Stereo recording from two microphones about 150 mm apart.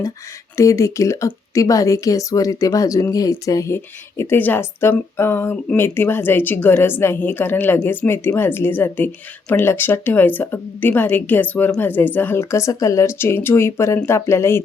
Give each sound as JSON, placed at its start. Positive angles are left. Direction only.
{"t": 0.5, "sound": "a woman's voice", "side_deg": 20}